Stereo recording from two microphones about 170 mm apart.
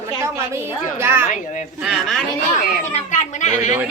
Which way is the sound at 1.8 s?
Centre (ahead or behind).